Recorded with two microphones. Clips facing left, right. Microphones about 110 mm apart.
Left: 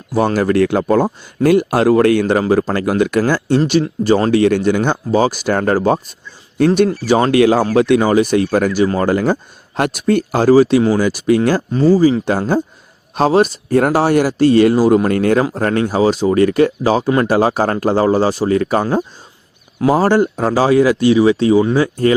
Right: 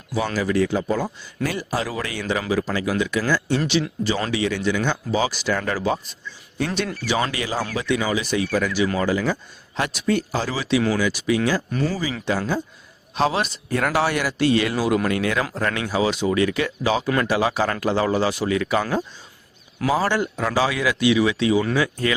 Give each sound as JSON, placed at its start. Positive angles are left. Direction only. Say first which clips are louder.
{"t": 0.1, "sound": "speech", "louder": "left 8 dB", "side_deg": 50}
{"t": 1.0, "sound": "speech", "louder": "left 12 dB", "side_deg": 50}
{"t": 6.7, "sound": "speech", "louder": "left 10 dB", "side_deg": 40}
{"t": 11.7, "sound": "speech", "louder": "left 12 dB", "side_deg": 30}
{"t": 12.3, "sound": "speech", "louder": "left 7 dB", "side_deg": 50}